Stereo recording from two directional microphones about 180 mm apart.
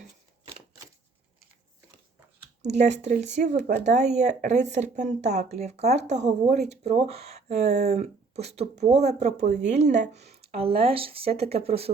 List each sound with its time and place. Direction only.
2.6 s speech: 40° right (ahead or behind)